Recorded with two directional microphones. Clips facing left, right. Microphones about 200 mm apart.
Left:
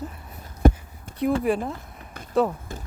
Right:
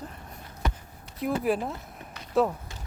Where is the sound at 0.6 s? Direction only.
50° left (ahead or behind).